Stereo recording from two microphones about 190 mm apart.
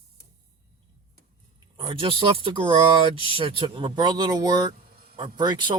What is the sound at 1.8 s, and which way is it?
Speech, 25° right (ahead or behind).